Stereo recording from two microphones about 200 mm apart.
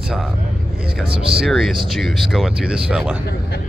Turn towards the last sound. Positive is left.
turn(degrees=-5)  # may be behind; listen again after turning